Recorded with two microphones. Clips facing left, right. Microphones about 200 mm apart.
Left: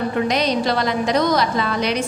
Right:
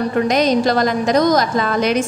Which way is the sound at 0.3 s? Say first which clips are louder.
Right 4 dB; 45° right (ahead or behind).